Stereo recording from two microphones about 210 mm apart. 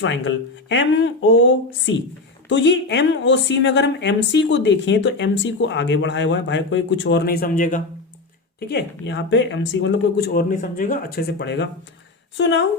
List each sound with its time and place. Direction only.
0.0 s speech: 60° left (ahead or behind); by 7.8 s 40° left (ahead or behind)
8.5 s speech: 55° left (ahead or behind)
10.5 s speech: 40° left (ahead or behind); by 12.6 s 60° left (ahead or behind)